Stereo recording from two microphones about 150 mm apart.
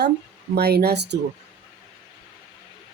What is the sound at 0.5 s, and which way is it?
Speech, 90° right.